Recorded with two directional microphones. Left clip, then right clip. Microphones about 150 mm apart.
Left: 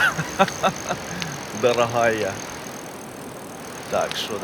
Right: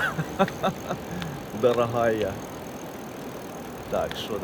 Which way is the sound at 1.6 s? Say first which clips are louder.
Left 3 dB; 15° right (ahead or behind).